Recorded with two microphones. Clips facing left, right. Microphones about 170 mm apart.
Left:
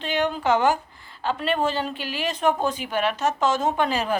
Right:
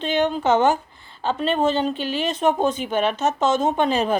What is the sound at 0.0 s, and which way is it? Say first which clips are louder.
A woman's voice: right 3 dB; 25° right (ahead or behind).